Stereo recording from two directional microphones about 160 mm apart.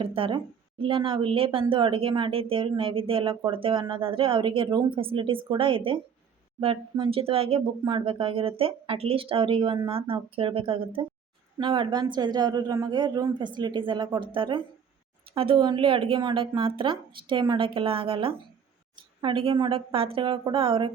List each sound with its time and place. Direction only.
0.0 s a woman's voice: 35° right (ahead or behind)